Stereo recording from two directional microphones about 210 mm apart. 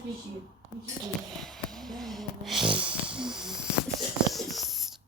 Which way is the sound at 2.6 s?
25° right (ahead or behind).